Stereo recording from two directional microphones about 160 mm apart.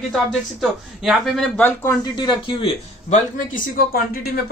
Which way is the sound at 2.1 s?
30° left (ahead or behind).